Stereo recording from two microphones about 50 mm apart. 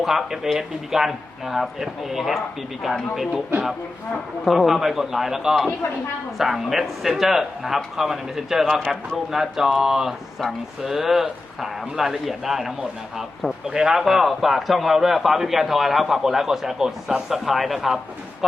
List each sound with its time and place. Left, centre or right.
0.0 s a man's voice: centre
4.4 s a man's voice: centre
8.6 s speech: centre
8.9 s a man's voice: centre